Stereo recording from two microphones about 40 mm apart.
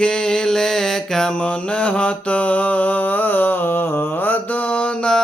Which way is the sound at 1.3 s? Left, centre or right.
Left.